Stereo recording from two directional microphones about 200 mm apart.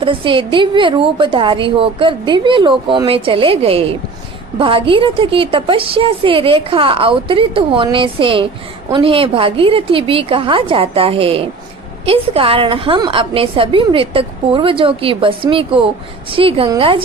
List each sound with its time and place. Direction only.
0.0 s a woman's voice: 25° right (ahead or behind)